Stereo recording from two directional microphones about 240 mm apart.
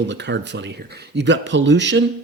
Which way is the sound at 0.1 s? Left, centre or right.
Right.